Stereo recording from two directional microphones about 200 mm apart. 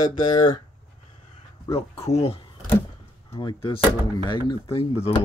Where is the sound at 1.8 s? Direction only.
30° left (ahead or behind).